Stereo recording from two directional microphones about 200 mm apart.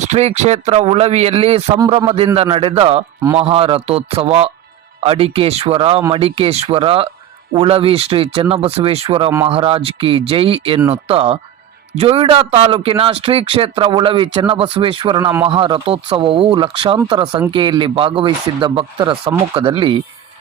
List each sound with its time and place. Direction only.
0.0 s speech: 35° right (ahead or behind)